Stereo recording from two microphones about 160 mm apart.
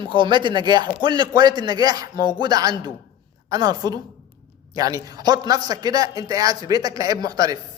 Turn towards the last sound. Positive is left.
turn(degrees=-25)  # may be behind; listen again after turning